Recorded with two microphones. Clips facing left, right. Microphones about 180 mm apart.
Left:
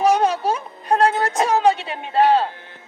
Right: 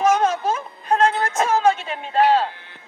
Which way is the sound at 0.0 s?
35° left (ahead or behind).